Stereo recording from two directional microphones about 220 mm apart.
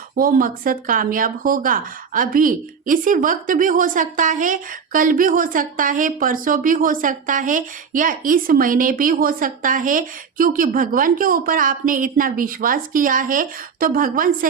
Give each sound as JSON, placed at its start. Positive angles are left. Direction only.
{"t": 0.2, "sound": "speech", "side_deg": -40}